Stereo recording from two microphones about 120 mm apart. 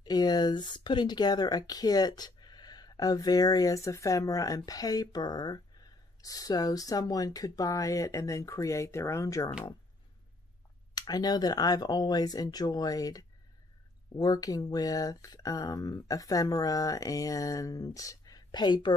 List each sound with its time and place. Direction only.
0.0 s speech: 35° left (ahead or behind)
11.0 s speech: 35° left (ahead or behind)